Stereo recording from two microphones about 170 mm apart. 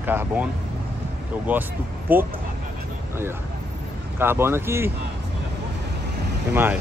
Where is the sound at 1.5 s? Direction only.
10° right (ahead or behind).